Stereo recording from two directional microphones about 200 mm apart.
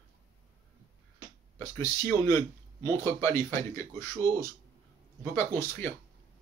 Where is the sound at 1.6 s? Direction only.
15° left (ahead or behind).